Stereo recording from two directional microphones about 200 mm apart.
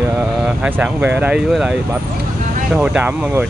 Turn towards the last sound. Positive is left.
turn(degrees=-5)  # may be behind; listen again after turning